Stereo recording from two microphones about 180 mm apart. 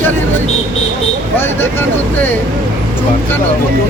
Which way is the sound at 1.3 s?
10° left (ahead or behind).